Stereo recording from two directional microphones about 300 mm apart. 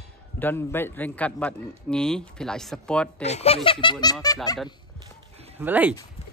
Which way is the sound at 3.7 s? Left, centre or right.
Centre.